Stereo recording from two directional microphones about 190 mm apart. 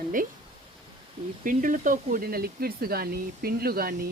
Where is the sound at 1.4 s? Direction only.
45° right (ahead or behind).